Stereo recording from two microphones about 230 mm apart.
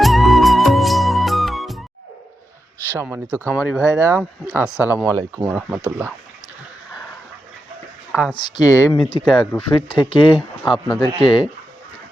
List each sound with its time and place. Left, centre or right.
0.0 s music: centre
2.9 s speech: centre
8.1 s speech: centre
8.4 s speech: centre
10.6 s speech: centre
10.9 s speech: left